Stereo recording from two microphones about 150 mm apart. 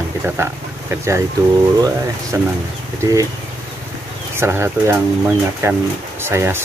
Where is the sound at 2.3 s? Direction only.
20° right (ahead or behind).